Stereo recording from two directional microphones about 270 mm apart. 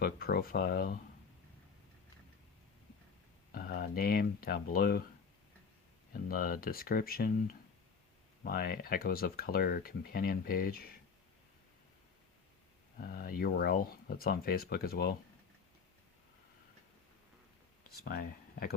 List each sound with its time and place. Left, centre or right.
0.0 s speech: left
3.5 s speech: left
6.2 s speech: left
8.4 s speech: left
13.0 s speech: left
18.1 s speech: left